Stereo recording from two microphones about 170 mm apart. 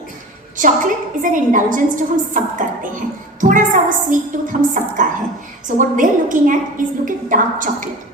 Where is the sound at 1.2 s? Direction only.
50° right (ahead or behind).